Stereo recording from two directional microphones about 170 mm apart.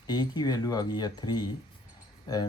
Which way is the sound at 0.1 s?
25° left (ahead or behind).